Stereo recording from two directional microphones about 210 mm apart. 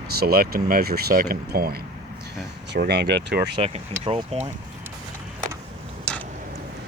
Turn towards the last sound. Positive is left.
turn(degrees=5)  # may be behind; listen again after turning